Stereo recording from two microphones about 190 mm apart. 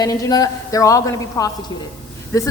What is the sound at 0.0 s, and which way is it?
A woman's voice, 20° left (ahead or behind).